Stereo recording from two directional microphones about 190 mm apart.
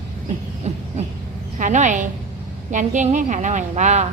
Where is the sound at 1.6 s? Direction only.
40° right (ahead or behind).